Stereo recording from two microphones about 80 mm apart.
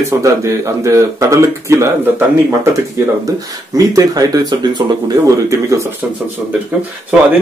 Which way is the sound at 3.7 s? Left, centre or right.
Right.